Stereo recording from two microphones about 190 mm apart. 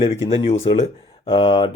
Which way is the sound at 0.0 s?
30° left (ahead or behind).